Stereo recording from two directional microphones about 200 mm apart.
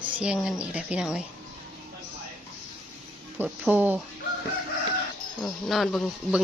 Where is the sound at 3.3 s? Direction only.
10° right (ahead or behind).